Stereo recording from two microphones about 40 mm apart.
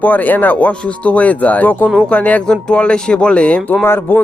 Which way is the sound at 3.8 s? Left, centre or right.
Left.